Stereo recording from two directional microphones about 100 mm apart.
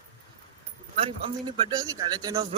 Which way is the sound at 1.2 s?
65° right (ahead or behind).